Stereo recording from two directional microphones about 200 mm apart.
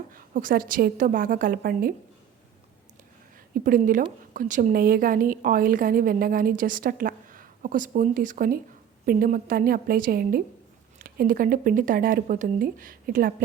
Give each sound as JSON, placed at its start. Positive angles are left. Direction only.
{"t": 0.1, "sound": "a woman's voice", "side_deg": -45}
{"t": 3.5, "sound": "a woman's voice", "side_deg": -45}